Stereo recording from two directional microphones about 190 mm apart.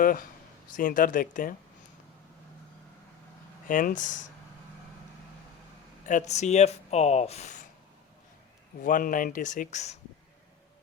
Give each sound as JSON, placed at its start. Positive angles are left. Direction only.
{"t": 0.0, "sound": "speech", "side_deg": 50}
{"t": 3.7, "sound": "speech", "side_deg": 45}
{"t": 6.1, "sound": "speech", "side_deg": 40}
{"t": 8.8, "sound": "speech", "side_deg": 45}